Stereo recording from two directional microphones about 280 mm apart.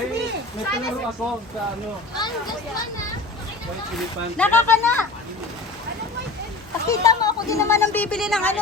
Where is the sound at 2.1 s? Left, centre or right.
Centre.